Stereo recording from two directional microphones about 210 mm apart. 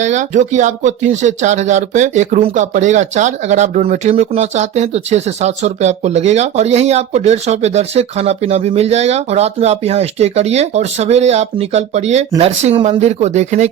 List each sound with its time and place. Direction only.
0.0 s speech: 35° right (ahead or behind)